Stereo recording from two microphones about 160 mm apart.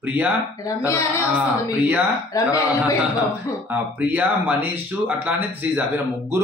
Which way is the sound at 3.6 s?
10° right (ahead or behind).